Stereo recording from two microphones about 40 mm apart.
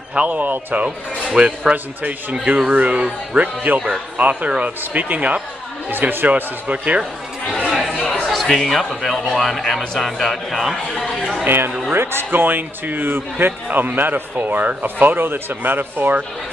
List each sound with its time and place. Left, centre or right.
0.1 s speech: right
0.8 s speech: right
5.9 s speech: right
7.4 s speech: left
8.1 s speech: centre
11.4 s a man's voice: right
11.9 s a man's voice: right